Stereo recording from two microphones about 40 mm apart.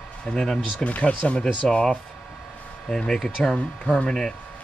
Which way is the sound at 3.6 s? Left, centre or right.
Left.